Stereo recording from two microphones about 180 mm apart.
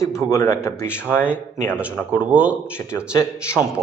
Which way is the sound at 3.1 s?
15° left (ahead or behind).